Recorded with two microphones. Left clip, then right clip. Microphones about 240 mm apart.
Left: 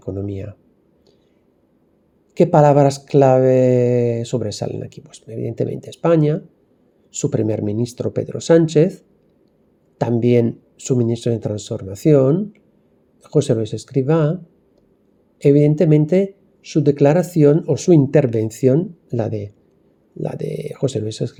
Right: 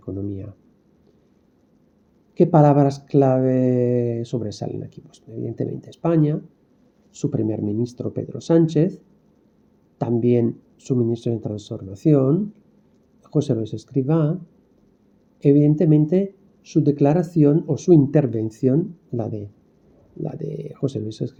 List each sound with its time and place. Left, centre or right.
0.2 s speech: left
2.3 s speech: left
15.4 s speech: left